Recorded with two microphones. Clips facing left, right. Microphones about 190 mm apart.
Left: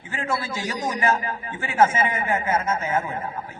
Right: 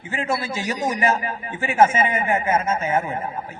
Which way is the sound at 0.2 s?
25° right (ahead or behind).